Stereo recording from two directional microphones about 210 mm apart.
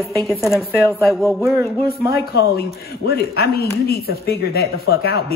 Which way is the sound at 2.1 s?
50° left (ahead or behind).